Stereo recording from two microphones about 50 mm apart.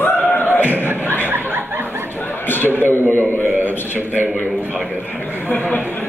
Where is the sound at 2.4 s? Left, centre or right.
Left.